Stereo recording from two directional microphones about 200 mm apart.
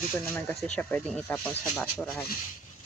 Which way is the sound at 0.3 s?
5° left (ahead or behind).